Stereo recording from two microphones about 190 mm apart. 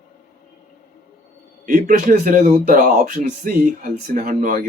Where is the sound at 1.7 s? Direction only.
45° right (ahead or behind).